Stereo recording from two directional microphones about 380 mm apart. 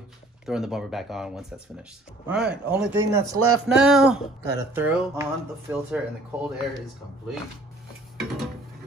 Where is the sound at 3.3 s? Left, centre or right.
Right.